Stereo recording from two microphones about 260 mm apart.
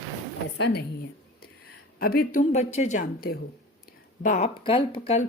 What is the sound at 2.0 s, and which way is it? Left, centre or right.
A woman's voice, left.